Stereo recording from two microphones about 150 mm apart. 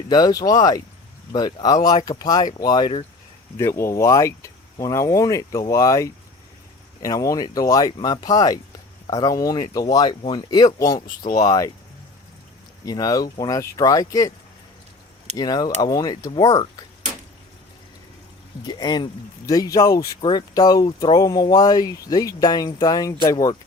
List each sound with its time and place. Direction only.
0.1 s speech: 25° left (ahead or behind)
12.8 s speech: 25° left (ahead or behind)
15.4 s speech: 25° left (ahead or behind)
18.6 s speech: 25° left (ahead or behind)